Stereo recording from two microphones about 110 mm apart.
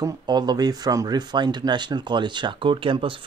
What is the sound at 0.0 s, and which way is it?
Speech, 40° right (ahead or behind).